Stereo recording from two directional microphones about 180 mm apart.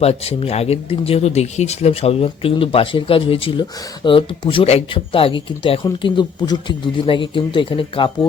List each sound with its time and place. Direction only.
0.0 s speech: 35° left (ahead or behind)